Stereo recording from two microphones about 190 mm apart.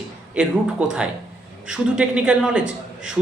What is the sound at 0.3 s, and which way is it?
A man's voice, 5° right (ahead or behind).